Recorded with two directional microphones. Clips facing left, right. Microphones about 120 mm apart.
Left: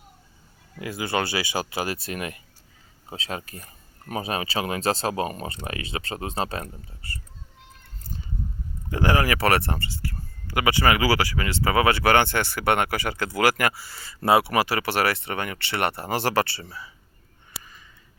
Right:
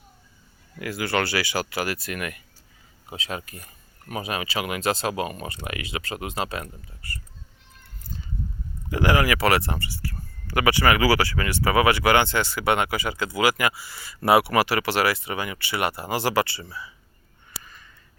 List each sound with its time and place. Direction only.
0.8 s speech: 20° left (ahead or behind)
8.9 s speech: 35° left (ahead or behind)
10.4 s speech: 20° left (ahead or behind)
12.1 s speech: 55° left (ahead or behind)
13.8 s speech: 35° left (ahead or behind)
14.3 s speech: 25° left (ahead or behind)
14.9 s speech: 55° left (ahead or behind)
16.6 s speech: 30° left (ahead or behind)